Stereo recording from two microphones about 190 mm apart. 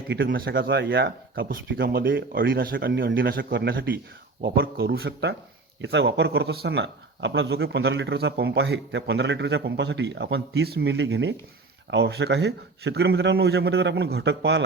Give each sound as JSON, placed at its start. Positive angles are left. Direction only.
{"t": 0.1, "sound": "speech", "side_deg": -75}
{"t": 0.3, "sound": "speech", "side_deg": -50}